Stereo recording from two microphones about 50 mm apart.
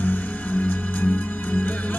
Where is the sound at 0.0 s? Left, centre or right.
Left.